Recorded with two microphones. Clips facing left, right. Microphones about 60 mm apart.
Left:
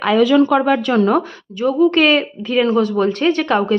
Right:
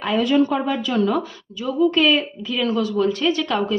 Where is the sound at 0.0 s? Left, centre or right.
Left.